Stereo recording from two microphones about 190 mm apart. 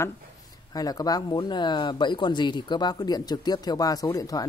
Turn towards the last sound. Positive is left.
turn(degrees=20)  # may be behind; listen again after turning